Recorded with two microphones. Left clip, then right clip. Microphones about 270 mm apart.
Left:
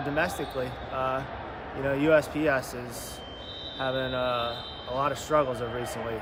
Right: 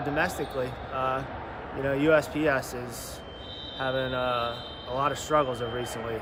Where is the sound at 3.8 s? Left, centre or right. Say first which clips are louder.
Even; centre.